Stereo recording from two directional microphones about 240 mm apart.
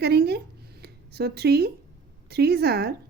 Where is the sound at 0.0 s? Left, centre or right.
Right.